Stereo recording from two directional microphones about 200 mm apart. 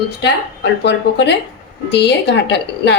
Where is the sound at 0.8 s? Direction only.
60° left (ahead or behind).